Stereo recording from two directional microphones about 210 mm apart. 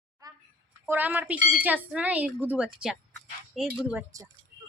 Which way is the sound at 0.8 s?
10° right (ahead or behind).